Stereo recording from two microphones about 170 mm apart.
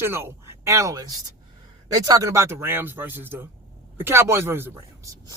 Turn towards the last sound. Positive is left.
turn(degrees=-15)  # may be behind; listen again after turning